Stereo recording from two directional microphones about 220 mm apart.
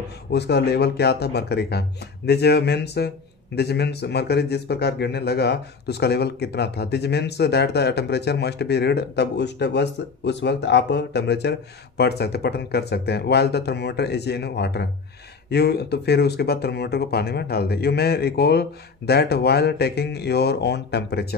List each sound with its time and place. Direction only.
0.3 s a man's voice: 50° left (ahead or behind)